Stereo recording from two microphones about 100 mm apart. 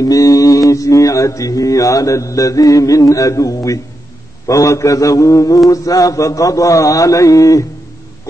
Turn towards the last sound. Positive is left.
turn(degrees=35)  # may be behind; listen again after turning